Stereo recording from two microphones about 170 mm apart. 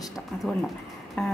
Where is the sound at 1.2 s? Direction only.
5° left (ahead or behind).